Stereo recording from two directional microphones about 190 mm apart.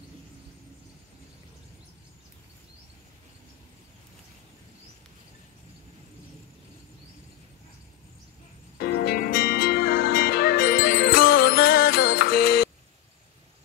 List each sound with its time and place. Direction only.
8.7 s music: 55° left (ahead or behind)